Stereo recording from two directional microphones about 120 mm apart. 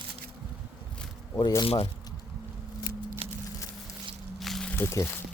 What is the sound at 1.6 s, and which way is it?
Speech, 55° left (ahead or behind).